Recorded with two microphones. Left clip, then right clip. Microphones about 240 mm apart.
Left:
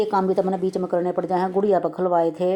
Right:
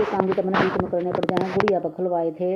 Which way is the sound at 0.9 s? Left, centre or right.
Left.